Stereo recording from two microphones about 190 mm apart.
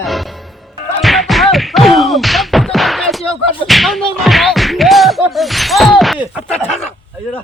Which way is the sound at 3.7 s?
Centre (ahead or behind).